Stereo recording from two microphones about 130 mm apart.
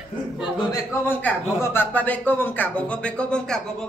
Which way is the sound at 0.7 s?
20° left (ahead or behind).